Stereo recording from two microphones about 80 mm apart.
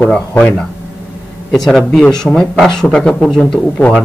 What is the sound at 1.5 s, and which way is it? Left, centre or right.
Speech, centre.